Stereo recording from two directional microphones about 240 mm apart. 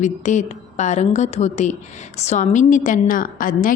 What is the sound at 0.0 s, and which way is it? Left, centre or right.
A woman's voice, left.